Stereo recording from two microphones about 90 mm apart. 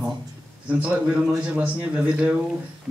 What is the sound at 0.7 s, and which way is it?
A man's voice, 15° right (ahead or behind).